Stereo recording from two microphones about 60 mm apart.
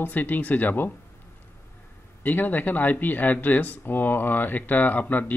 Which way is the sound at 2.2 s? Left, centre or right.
Left.